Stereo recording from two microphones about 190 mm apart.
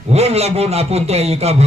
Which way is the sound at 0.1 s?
35° right (ahead or behind).